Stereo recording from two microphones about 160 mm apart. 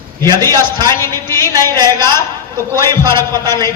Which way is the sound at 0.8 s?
20° left (ahead or behind).